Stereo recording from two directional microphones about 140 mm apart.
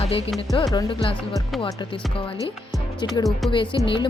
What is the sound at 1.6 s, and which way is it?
Speech, 40° left (ahead or behind).